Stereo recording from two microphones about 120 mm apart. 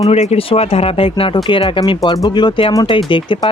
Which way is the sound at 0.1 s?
60° left (ahead or behind).